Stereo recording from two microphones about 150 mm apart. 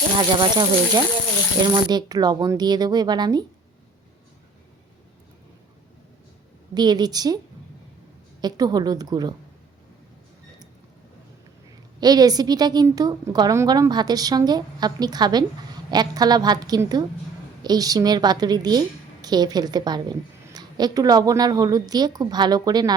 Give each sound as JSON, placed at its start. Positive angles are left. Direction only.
{"t": 0.2, "sound": "a woman's voice", "side_deg": -30}
{"t": 6.7, "sound": "a woman's voice", "side_deg": -25}
{"t": 8.4, "sound": "a woman's voice", "side_deg": -25}
{"t": 11.9, "sound": "a woman's voice", "side_deg": -25}